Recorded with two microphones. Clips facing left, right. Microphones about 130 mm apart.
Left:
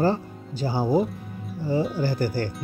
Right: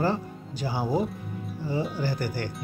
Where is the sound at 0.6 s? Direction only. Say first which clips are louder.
Left 4 dB; 30° left (ahead or behind).